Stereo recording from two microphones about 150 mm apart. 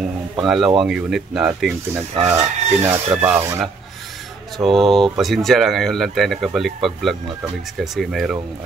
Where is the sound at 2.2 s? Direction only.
15° right (ahead or behind).